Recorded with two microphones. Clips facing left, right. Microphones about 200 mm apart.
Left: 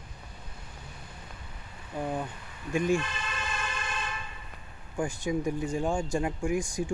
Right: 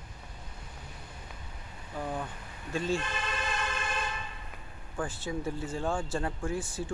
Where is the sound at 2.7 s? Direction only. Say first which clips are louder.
Left 5 dB; 15° left (ahead or behind).